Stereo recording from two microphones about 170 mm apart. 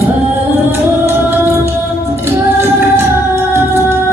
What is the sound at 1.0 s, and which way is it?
Music, 15° right (ahead or behind).